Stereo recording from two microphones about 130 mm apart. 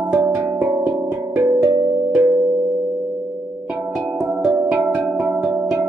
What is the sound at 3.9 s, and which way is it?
Music, centre (ahead or behind).